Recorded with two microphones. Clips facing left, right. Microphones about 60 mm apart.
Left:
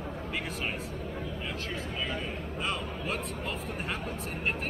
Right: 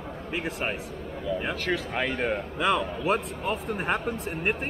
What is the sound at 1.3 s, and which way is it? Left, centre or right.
A man's voice, right.